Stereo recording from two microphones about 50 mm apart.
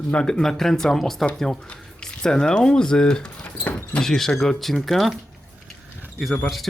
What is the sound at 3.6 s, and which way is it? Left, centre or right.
Basketball bounce, left.